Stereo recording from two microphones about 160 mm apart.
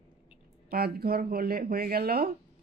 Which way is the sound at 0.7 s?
75° right (ahead or behind).